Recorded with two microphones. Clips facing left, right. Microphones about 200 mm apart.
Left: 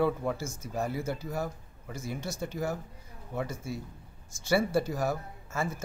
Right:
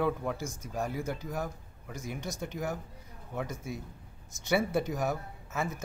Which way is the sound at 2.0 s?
15° right (ahead or behind).